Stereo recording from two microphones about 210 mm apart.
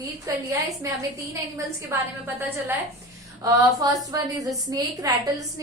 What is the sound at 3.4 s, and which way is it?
A woman's voice, 15° right (ahead or behind).